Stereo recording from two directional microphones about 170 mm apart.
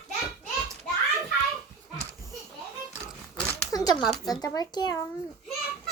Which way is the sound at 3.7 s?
20° left (ahead or behind).